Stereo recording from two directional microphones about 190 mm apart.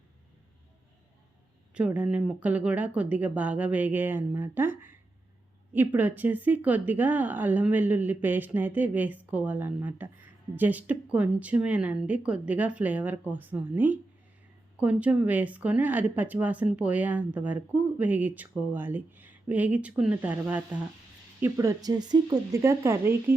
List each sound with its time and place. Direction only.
1.7 s speech: 5° right (ahead or behind)